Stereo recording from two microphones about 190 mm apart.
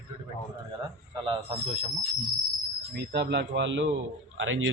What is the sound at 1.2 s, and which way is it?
Speech, 30° right (ahead or behind).